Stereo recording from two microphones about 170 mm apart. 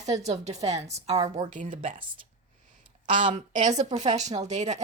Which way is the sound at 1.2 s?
20° right (ahead or behind).